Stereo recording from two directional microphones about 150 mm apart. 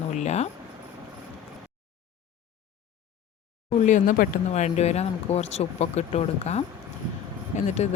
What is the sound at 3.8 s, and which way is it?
Speech, 60° left (ahead or behind).